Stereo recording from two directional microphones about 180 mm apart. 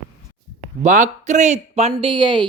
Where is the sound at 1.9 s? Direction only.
25° right (ahead or behind).